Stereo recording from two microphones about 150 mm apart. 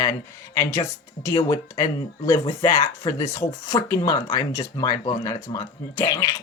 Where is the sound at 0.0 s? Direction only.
20° left (ahead or behind).